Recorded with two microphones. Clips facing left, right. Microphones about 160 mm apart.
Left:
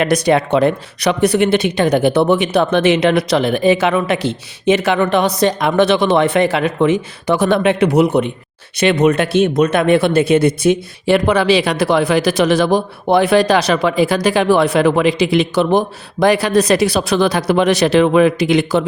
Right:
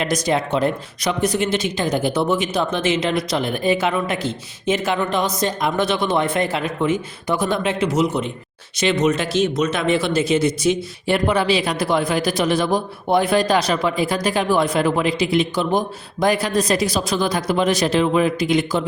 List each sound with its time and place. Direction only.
0.0 s speech: 65° left (ahead or behind)